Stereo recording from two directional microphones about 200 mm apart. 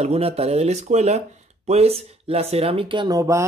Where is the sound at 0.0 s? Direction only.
30° right (ahead or behind).